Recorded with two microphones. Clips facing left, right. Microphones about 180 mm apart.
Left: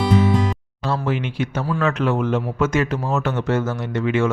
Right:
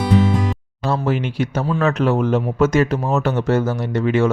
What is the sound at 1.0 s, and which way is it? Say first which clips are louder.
Speech: right 3 dB; 40° right (ahead or behind).